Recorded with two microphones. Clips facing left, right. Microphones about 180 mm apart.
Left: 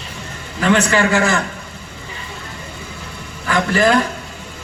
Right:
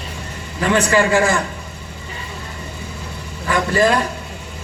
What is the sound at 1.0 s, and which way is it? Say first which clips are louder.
Speech: right 1 dB; 25° right (ahead or behind).